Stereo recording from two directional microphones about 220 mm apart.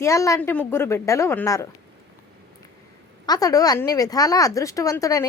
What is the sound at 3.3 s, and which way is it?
Speech, 15° left (ahead or behind).